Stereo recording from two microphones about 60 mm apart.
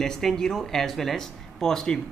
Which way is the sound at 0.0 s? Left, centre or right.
Centre.